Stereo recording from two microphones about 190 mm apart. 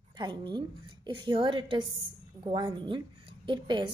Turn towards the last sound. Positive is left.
turn(degrees=-25)  # may be behind; listen again after turning